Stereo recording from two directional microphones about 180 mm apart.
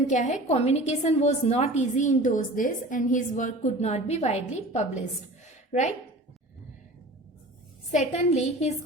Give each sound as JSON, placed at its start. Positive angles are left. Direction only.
{"t": 0.1, "sound": "a woman's voice", "side_deg": 40}
{"t": 7.9, "sound": "a woman's voice", "side_deg": 40}